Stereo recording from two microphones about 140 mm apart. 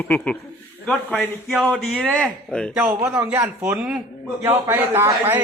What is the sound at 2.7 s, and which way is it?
A man's voice, 10° right (ahead or behind).